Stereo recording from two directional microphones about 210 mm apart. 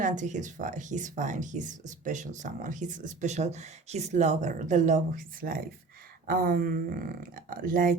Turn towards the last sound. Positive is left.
turn(degrees=-40)  # may be behind; listen again after turning